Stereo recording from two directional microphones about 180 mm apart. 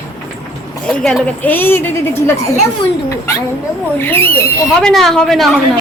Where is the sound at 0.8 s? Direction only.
5° left (ahead or behind).